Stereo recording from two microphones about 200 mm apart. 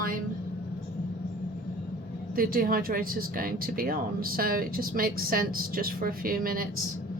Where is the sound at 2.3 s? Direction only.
45° right (ahead or behind).